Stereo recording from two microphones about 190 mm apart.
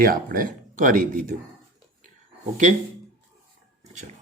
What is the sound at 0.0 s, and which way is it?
Speech, 50° right (ahead or behind).